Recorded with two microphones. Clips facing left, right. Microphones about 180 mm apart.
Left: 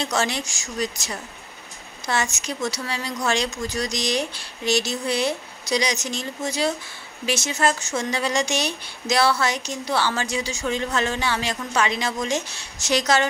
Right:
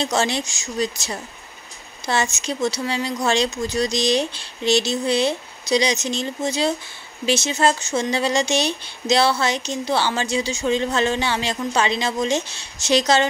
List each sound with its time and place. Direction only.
0.0 s speech: 25° right (ahead or behind)